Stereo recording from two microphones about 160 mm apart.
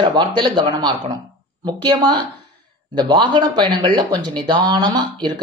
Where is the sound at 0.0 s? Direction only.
30° right (ahead or behind).